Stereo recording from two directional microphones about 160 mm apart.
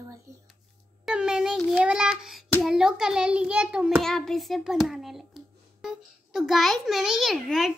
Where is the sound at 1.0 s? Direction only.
5° right (ahead or behind).